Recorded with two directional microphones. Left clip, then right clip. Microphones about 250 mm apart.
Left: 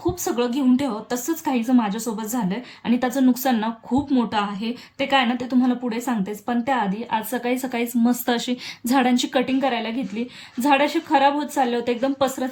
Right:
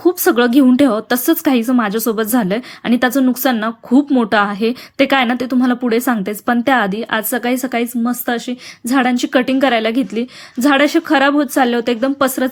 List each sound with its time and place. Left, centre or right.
0.0 s speech: centre
4.3 s speech: centre